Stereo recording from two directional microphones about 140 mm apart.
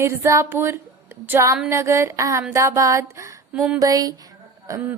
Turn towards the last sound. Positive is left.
turn(degrees=-20)  # may be behind; listen again after turning